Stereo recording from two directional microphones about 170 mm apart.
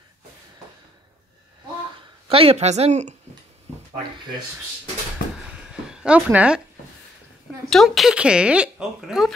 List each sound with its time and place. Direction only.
2.2 s a woman's voice: 35° right (ahead or behind)
5.4 s a sound: 5° right (ahead or behind)
7.7 s speech: centre (ahead or behind)